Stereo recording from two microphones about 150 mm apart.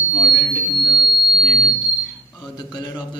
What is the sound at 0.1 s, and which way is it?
Buzzer, 25° left (ahead or behind).